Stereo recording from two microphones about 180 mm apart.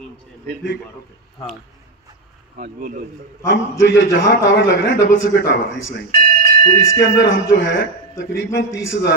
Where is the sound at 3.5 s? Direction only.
90° left.